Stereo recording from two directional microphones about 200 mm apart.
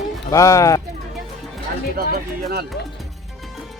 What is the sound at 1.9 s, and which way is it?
Speech, 50° right (ahead or behind).